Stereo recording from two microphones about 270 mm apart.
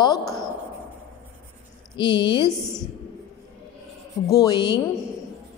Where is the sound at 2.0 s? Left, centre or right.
Centre.